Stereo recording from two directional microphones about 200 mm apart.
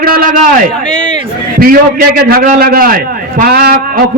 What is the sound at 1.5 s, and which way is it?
A man's voice, 45° right (ahead or behind).